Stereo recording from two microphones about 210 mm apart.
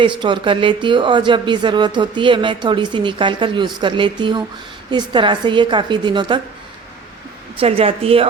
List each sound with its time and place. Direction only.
0.0 s speech: 25° right (ahead or behind)
7.6 s speech: 25° right (ahead or behind)